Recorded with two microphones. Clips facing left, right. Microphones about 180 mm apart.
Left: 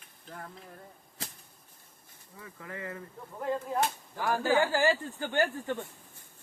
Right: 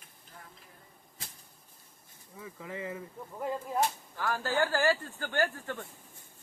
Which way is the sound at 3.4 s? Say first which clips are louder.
Left 2 dB; 5° right (ahead or behind).